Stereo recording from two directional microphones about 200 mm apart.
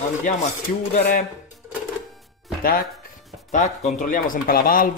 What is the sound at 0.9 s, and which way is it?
Speech, 40° left (ahead or behind).